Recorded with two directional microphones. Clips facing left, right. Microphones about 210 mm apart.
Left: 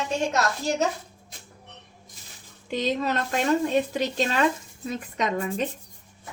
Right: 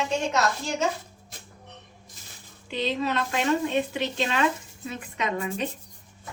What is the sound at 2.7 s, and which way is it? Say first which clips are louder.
Speech: left 1 dB; 45° left (ahead or behind).